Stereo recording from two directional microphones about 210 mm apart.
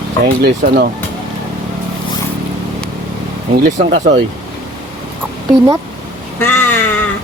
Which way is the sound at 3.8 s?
30° right (ahead or behind).